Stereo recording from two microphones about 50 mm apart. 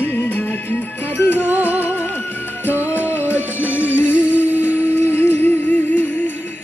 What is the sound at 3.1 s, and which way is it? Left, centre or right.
Music, left.